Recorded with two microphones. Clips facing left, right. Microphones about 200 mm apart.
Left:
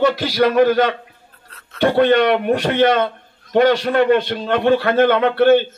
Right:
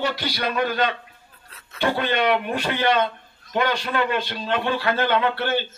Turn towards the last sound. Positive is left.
turn(degrees=50)  # may be behind; listen again after turning